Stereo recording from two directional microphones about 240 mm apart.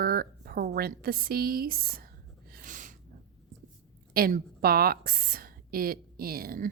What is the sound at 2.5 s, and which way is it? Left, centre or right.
Snort, right.